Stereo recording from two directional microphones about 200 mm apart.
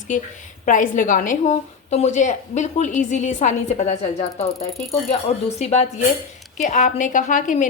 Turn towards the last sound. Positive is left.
turn(degrees=40)  # may be behind; listen again after turning